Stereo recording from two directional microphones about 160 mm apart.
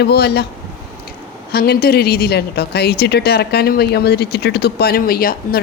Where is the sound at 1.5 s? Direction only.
75° left (ahead or behind).